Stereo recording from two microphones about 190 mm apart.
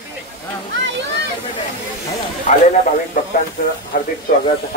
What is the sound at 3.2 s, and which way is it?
Speech, 45° left (ahead or behind).